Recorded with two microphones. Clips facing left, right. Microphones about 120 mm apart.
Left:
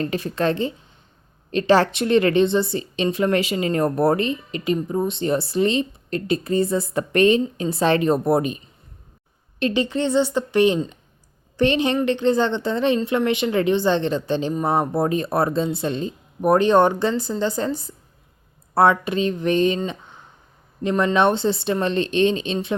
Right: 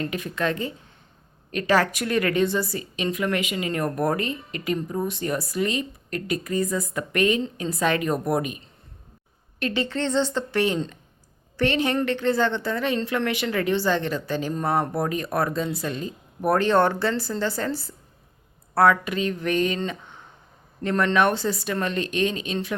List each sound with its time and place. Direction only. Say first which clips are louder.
0.0 s a woman's voice: left 4 dB; 35° left (ahead or behind)
9.6 s a woman's voice: left 5 dB; 20° left (ahead or behind)
20.8 s a woman's voice: left 3 dB; 20° left (ahead or behind)